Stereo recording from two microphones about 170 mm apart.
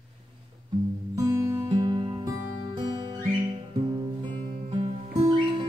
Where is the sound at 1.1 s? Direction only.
20° right (ahead or behind).